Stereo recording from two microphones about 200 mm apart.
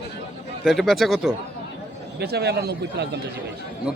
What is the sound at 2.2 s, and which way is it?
Speech, 55° right (ahead or behind).